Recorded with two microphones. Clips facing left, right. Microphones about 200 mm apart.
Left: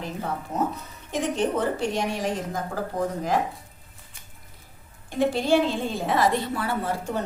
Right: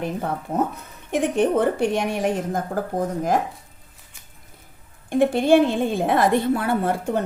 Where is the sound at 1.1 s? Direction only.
55° right (ahead or behind).